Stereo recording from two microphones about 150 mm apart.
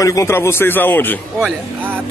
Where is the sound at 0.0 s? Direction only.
20° left (ahead or behind).